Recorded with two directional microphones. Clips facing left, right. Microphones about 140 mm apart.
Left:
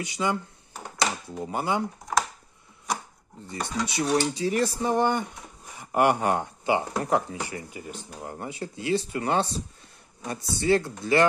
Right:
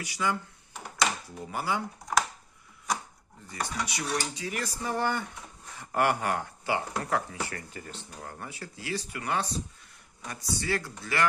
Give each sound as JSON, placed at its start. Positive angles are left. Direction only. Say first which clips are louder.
{"t": 0.0, "sound": "speech", "louder": "left 3 dB", "side_deg": 20}
{"t": 1.4, "sound": "speech", "louder": "left 5 dB", "side_deg": 20}
{"t": 3.4, "sound": "speech", "louder": "left 4 dB", "side_deg": 25}